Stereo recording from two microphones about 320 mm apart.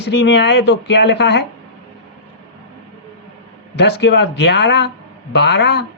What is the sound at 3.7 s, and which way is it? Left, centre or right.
A man's voice, left.